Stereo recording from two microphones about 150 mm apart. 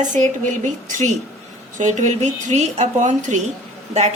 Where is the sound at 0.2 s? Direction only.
55° right (ahead or behind).